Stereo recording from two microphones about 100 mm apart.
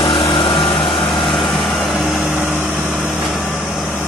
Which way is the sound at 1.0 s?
60° left (ahead or behind).